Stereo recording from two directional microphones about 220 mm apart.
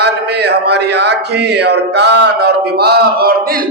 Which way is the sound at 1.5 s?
50° right (ahead or behind).